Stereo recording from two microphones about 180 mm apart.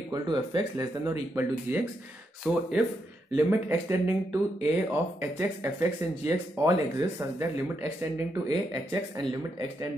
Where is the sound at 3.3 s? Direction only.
15° right (ahead or behind).